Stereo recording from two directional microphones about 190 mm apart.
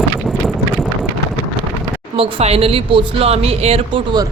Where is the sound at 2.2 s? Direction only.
30° right (ahead or behind).